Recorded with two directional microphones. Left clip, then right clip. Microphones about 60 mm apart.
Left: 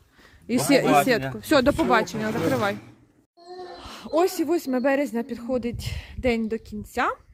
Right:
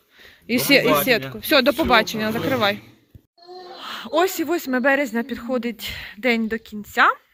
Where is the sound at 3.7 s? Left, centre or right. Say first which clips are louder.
Right 3 dB; centre.